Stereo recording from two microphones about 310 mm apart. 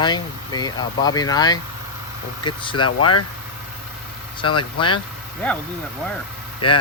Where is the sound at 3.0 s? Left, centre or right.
Left.